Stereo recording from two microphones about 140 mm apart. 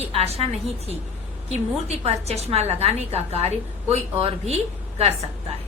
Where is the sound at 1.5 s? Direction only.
50° right (ahead or behind).